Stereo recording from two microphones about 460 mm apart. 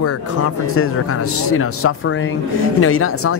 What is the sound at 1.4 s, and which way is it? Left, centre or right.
Speech, left.